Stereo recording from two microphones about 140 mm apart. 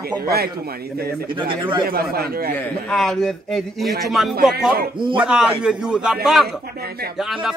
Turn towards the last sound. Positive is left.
turn(degrees=-5)  # may be behind; listen again after turning